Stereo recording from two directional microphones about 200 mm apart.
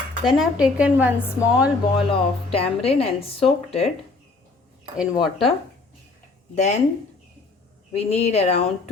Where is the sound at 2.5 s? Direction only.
30° left (ahead or behind).